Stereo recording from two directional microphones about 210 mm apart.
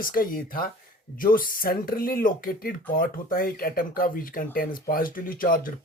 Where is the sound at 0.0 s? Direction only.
40° left (ahead or behind).